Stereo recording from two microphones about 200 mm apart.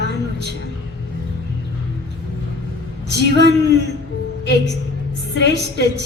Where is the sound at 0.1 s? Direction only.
60° left (ahead or behind).